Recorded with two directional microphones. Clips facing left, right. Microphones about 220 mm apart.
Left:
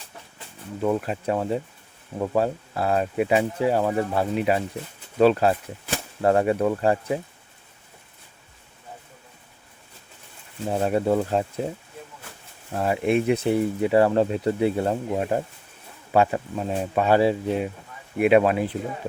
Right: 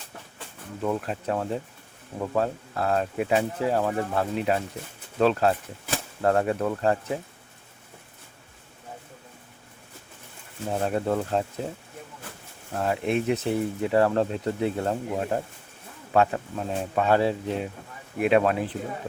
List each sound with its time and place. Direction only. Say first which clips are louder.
0.8 s speech: left 4 dB; 5° left (ahead or behind)
10.7 s speech: left 4 dB; 10° left (ahead or behind)
12.7 s speech: left 3 dB; 5° left (ahead or behind)